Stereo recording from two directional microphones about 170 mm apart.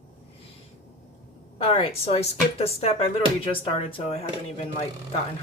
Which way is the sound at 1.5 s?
35° left (ahead or behind).